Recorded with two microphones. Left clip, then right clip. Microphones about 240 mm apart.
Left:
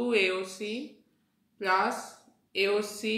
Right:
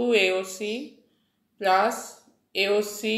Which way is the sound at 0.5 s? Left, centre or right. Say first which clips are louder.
Right 5 dB; right.